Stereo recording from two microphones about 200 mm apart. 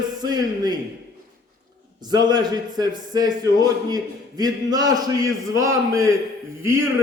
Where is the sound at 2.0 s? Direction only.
20° right (ahead or behind).